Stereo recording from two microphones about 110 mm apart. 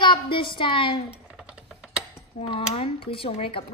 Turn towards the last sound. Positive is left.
turn(degrees=55)  # may be behind; listen again after turning